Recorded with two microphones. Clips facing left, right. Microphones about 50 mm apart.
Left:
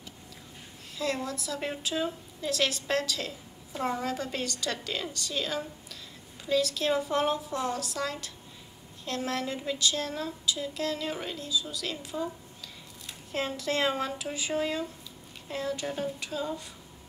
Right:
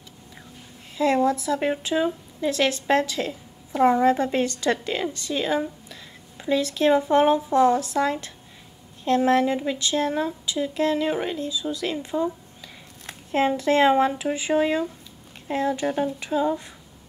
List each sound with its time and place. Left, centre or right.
0.9 s a woman's voice: right
13.3 s a woman's voice: right